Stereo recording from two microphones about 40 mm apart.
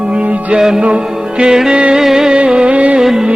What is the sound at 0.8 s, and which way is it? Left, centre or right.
Music, right.